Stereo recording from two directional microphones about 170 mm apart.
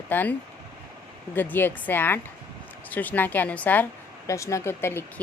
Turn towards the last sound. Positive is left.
turn(degrees=15)  # may be behind; listen again after turning